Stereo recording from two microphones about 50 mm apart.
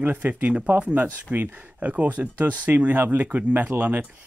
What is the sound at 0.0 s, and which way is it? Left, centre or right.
Speech, right.